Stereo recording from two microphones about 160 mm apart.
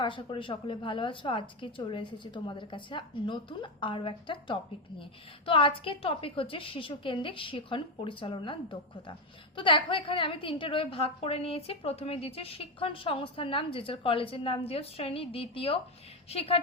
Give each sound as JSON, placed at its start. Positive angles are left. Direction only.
{"t": 0.0, "sound": "a woman's voice", "side_deg": 30}